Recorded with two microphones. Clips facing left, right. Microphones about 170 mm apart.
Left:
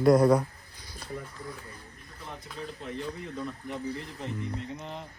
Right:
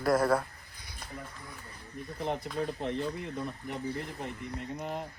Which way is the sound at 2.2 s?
60° right (ahead or behind).